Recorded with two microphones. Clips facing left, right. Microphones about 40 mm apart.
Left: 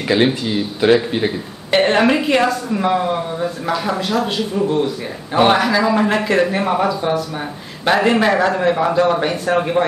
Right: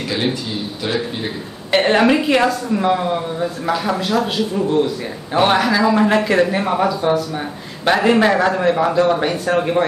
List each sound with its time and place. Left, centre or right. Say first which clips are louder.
0.8 s a man's voice: left 9 dB; left
1.7 s a woman's voice: even; centre